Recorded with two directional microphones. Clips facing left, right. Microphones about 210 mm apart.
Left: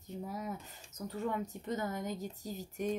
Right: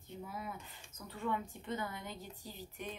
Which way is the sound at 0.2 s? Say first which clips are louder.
Left 4 dB; 40° left (ahead or behind).